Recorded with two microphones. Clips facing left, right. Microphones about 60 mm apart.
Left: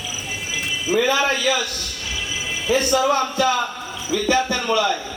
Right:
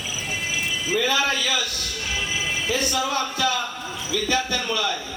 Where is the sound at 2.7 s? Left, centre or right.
Left.